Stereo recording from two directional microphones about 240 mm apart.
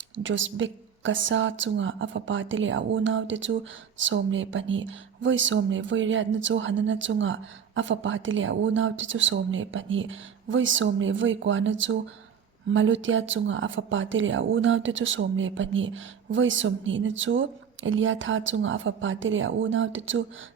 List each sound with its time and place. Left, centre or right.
0.2 s speech: right